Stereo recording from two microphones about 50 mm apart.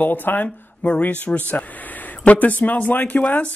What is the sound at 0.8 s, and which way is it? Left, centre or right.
Speech, left.